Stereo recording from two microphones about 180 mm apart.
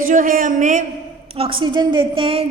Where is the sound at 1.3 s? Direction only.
30° right (ahead or behind).